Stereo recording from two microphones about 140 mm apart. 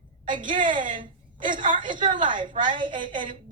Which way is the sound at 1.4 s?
70° right (ahead or behind).